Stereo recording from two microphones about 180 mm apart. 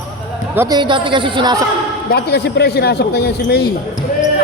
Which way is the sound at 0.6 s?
20° right (ahead or behind).